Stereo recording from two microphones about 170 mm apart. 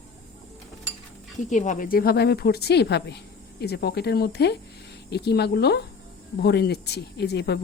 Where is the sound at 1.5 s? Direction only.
45° left (ahead or behind).